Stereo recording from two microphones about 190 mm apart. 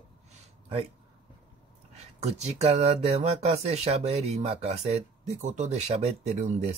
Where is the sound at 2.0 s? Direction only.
35° right (ahead or behind).